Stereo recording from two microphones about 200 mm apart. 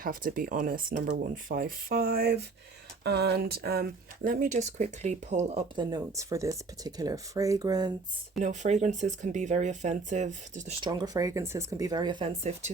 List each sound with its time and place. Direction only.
0.0 s speech: 45° right (ahead or behind)
5.9 s speech: 15° right (ahead or behind)
8.4 s speech: 35° right (ahead or behind)
10.8 s speech: 20° right (ahead or behind)